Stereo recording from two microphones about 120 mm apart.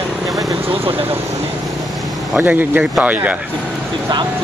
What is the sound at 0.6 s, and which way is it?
Vehicle, 50° right (ahead or behind).